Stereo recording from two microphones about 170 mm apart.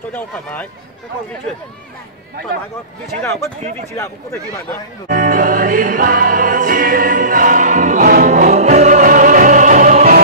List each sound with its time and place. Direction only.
0.1 s speech: 10° left (ahead or behind)
3.9 s speech: 15° left (ahead or behind)
5.0 s music: 55° right (ahead or behind)